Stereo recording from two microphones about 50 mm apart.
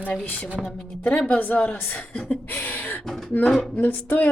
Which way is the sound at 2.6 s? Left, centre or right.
Left.